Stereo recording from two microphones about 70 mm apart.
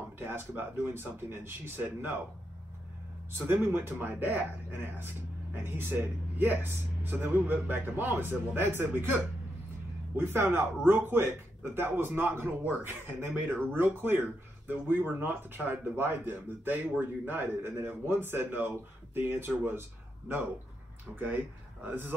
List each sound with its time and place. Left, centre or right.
0.2 s speech: right
3.3 s a man's voice: right